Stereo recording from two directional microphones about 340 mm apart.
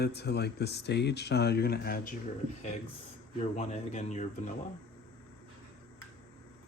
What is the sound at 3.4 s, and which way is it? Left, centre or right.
Speech, centre.